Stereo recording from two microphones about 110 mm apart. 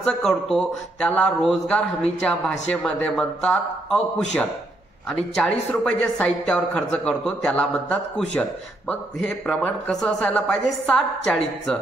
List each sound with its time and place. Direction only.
0.0 s a woman's voice: 5° left (ahead or behind)